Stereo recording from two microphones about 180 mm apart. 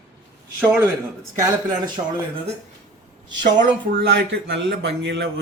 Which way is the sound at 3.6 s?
65° right (ahead or behind).